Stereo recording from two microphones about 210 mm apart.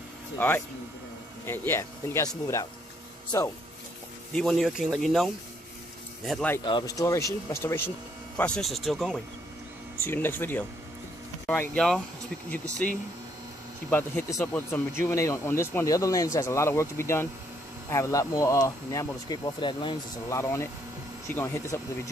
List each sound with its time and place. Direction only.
0.4 s speech: 5° left (ahead or behind)
4.3 s speech: centre (ahead or behind)
6.6 s speech: 20° left (ahead or behind)
13.8 s speech: 10° left (ahead or behind)